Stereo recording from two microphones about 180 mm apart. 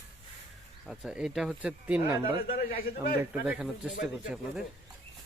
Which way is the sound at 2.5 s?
55° left (ahead or behind).